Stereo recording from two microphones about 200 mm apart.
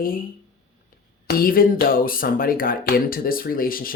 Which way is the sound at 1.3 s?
45° left (ahead or behind).